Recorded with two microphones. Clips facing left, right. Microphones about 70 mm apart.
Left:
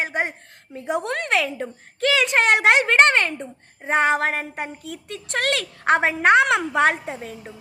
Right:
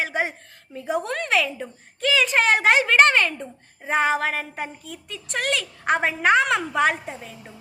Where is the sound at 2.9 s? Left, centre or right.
Left.